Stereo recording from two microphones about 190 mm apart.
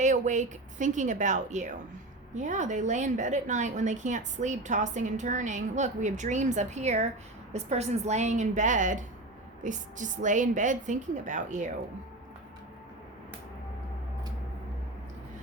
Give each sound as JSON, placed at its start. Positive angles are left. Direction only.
{"t": 0.0, "sound": "a woman's voice", "side_deg": -40}